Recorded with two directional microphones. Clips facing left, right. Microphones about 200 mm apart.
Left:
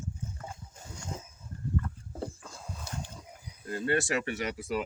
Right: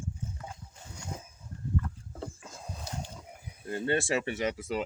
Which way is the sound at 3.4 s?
25° right (ahead or behind).